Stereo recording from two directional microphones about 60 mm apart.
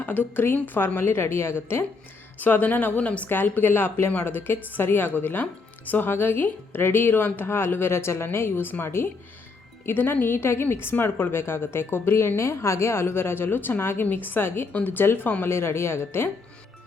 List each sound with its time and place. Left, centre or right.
0.0 s a woman's voice: left
14.7 s a woman's voice: left